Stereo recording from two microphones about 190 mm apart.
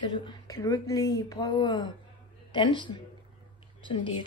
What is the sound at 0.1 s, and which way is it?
Speech, 25° left (ahead or behind).